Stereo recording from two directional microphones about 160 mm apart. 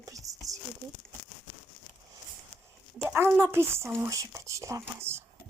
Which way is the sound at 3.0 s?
10° right (ahead or behind).